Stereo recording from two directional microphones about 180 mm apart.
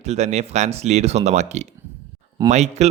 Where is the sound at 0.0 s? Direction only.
40° right (ahead or behind).